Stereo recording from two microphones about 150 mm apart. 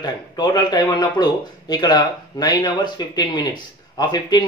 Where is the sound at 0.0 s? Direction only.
30° left (ahead or behind).